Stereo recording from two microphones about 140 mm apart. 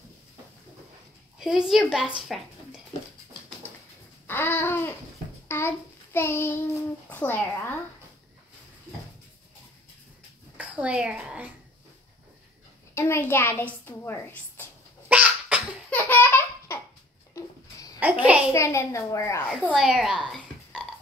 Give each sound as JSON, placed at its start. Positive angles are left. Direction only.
{"t": 1.4, "sound": "a woman's voice", "side_deg": -5}
{"t": 4.3, "sound": "a child's voice", "side_deg": 15}
{"t": 5.5, "sound": "child singing", "side_deg": 15}
{"t": 7.1, "sound": "a child's voice", "side_deg": 15}
{"t": 10.6, "sound": "a woman's voice", "side_deg": -10}
{"t": 12.9, "sound": "a child's voice", "side_deg": 15}
{"t": 15.0, "sound": "sneeze", "side_deg": -10}
{"t": 15.9, "sound": "laughter", "side_deg": 15}
{"t": 17.4, "sound": "a sound", "side_deg": 25}
{"t": 17.9, "sound": "a child's voice", "side_deg": -10}
{"t": 18.5, "sound": "a child's voice", "side_deg": 20}
{"t": 19.7, "sound": "a sound", "side_deg": 0}